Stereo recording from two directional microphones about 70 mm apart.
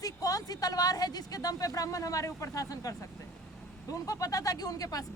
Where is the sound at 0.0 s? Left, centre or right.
Left.